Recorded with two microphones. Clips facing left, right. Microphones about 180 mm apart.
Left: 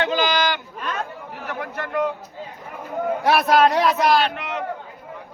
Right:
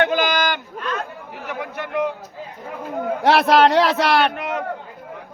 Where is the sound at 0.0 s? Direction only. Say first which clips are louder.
Right 2 dB; 55° right (ahead or behind).